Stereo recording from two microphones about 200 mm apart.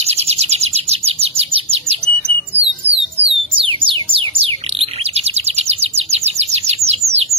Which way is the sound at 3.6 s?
25° right (ahead or behind).